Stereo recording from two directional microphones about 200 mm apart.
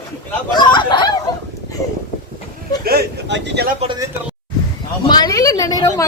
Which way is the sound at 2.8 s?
50° right (ahead or behind).